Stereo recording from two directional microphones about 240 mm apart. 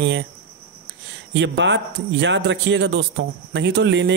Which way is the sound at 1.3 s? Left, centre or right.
Right.